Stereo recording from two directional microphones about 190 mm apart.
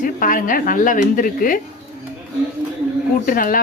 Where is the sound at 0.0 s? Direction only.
45° left (ahead or behind).